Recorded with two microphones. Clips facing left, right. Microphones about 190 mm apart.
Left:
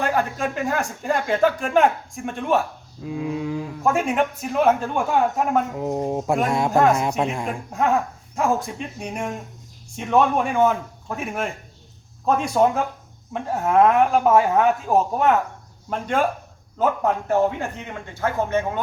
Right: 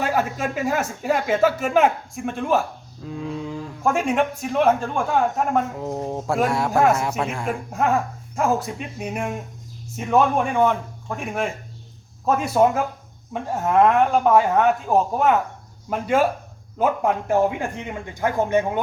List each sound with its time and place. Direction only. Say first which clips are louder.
0.0 s a man's voice: even; 5° right (ahead or behind); by 6.7 s 20° left (ahead or behind)
7.4 s speech: even; centre (ahead or behind)